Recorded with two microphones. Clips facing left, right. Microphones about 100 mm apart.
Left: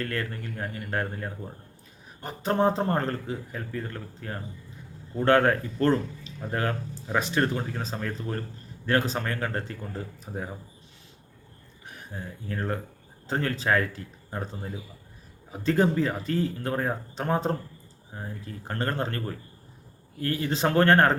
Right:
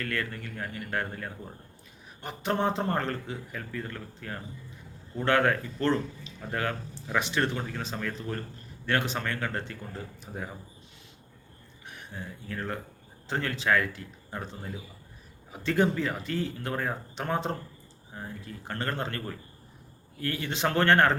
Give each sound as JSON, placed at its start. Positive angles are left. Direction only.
{"t": 0.0, "sound": "speech", "side_deg": 30}
{"t": 5.2, "sound": "speech", "side_deg": 40}
{"t": 6.5, "sound": "speech", "side_deg": 30}
{"t": 10.3, "sound": "speech", "side_deg": 25}
{"t": 11.9, "sound": "speech", "side_deg": 40}
{"t": 15.6, "sound": "speech", "side_deg": 35}
{"t": 20.2, "sound": "speech", "side_deg": 35}